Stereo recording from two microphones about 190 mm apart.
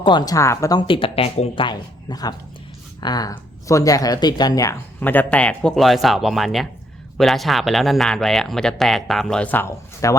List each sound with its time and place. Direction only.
0.0 s speech: 25° left (ahead or behind)